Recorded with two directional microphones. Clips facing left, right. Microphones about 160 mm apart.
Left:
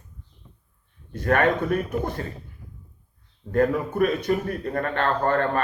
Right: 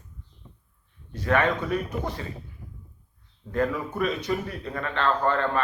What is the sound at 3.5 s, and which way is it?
Speech, 55° left (ahead or behind).